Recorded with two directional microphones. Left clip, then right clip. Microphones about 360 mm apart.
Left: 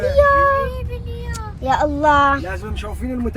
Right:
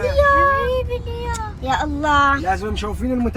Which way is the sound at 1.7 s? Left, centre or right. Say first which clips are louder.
Left 4 dB; centre.